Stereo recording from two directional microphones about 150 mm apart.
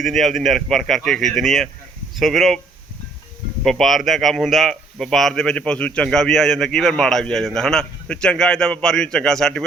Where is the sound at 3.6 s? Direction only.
Centre (ahead or behind).